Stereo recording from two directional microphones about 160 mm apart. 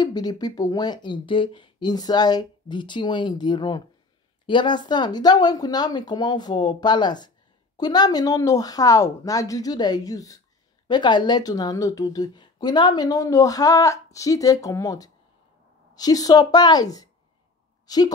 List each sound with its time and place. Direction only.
0.0 s speech: 25° left (ahead or behind)